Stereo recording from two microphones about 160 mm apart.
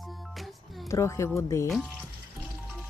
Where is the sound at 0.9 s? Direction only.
20° left (ahead or behind).